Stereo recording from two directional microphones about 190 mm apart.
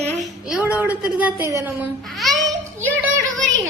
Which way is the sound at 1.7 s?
Centre (ahead or behind).